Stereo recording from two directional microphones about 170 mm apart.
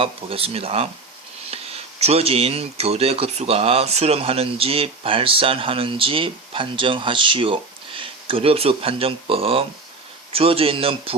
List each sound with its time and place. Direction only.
0.0 s speech: 35° right (ahead or behind)